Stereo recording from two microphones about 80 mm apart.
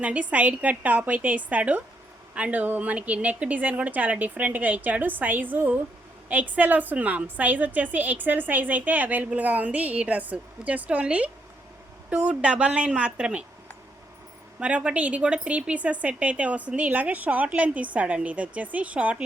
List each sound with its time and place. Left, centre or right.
0.0 s a woman's voice: centre
14.6 s speech: centre